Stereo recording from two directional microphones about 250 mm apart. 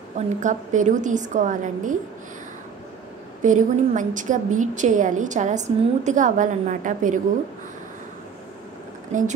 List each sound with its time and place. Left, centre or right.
0.4 s a woman's voice: right
3.4 s a woman's voice: right
9.1 s a woman's voice: right